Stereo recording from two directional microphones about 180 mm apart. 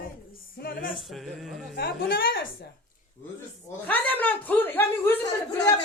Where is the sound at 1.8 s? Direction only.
60° left (ahead or behind).